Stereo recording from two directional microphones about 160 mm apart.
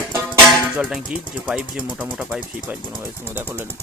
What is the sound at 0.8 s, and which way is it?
Speech, 5° right (ahead or behind).